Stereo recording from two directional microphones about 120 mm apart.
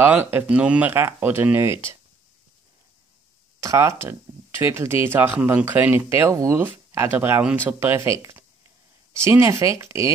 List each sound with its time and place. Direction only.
0.0 s speech: 15° right (ahead or behind)
3.6 s speech: 25° right (ahead or behind)